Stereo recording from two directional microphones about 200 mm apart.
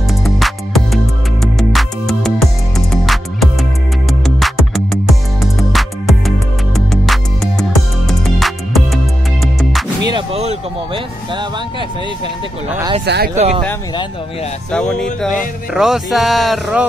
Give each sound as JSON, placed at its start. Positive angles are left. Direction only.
{"t": 0.2, "sound": "music", "side_deg": 0}
{"t": 10.0, "sound": "artillery fire", "side_deg": -25}
{"t": 12.6, "sound": "speech", "side_deg": -10}
{"t": 13.0, "sound": "speech", "side_deg": -55}
{"t": 13.4, "sound": "speech", "side_deg": -30}
{"t": 14.7, "sound": "speech", "side_deg": 5}